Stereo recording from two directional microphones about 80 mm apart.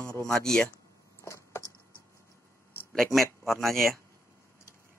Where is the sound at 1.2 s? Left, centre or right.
Left.